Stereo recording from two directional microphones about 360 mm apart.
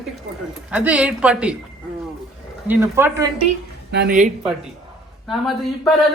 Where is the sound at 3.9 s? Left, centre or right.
Right.